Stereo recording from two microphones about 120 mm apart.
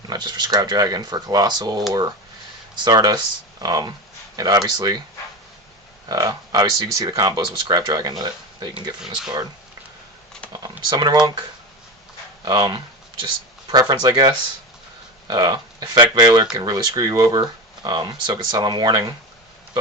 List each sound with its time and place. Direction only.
0.1 s speech: 40° right (ahead or behind)
6.1 s speech: 30° right (ahead or behind)
9.0 s speech: 5° right (ahead or behind)
10.5 s speech: 35° right (ahead or behind)
12.5 s speech: 40° right (ahead or behind)